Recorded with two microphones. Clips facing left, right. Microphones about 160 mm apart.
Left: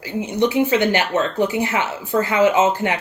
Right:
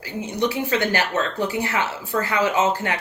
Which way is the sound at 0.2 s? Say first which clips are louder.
Left 6 dB; 20° left (ahead or behind).